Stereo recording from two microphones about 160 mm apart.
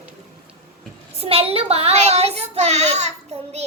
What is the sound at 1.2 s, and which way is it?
A child's voice, 40° right (ahead or behind).